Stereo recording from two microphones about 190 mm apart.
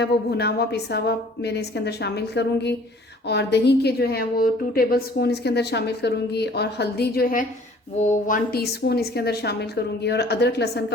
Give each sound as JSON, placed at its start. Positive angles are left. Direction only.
{"t": 0.0, "sound": "a woman's voice", "side_deg": 60}
{"t": 7.9, "sound": "speech", "side_deg": 40}
{"t": 8.5, "sound": "a woman's voice", "side_deg": 55}